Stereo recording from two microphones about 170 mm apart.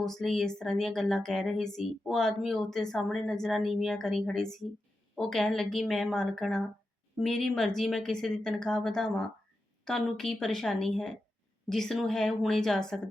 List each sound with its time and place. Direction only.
0.0 s a woman's voice: centre (ahead or behind)